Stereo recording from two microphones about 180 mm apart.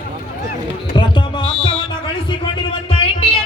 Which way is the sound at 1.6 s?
25° left (ahead or behind).